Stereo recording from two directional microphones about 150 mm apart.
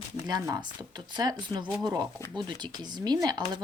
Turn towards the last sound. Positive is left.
turn(degrees=-25)  # may be behind; listen again after turning